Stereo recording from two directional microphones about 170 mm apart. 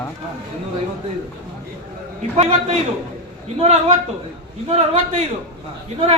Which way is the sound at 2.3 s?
40° right (ahead or behind).